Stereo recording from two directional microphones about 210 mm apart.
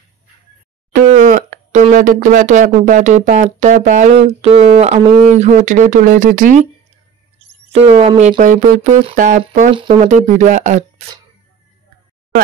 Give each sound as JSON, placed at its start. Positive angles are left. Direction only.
{"t": 0.9, "sound": "speech", "side_deg": -35}
{"t": 7.3, "sound": "speech", "side_deg": -30}